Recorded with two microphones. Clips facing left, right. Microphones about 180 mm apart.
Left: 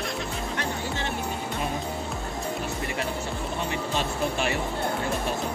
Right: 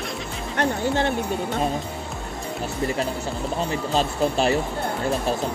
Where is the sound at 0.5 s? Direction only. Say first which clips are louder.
Right 12 dB; 60° right (ahead or behind).